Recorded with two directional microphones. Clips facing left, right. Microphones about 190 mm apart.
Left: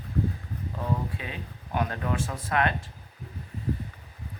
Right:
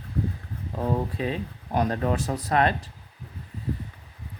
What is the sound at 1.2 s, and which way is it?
Speech, 35° right (ahead or behind).